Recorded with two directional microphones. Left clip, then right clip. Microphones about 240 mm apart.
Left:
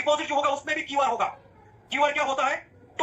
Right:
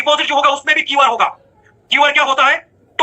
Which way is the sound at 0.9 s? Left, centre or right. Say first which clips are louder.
Right 9 dB; centre.